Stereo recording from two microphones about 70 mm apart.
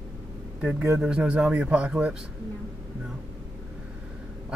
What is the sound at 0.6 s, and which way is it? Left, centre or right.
Speech, centre.